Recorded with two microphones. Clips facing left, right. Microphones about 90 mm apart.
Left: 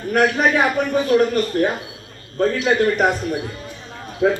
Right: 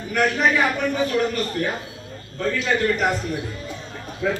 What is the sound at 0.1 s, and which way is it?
Speech, 50° left (ahead or behind).